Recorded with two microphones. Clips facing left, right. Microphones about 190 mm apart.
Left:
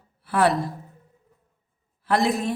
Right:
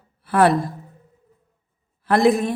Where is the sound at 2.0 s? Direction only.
55° right (ahead or behind).